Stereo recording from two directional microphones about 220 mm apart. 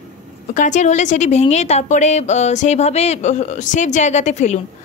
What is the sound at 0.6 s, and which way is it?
A woman's voice, 35° left (ahead or behind).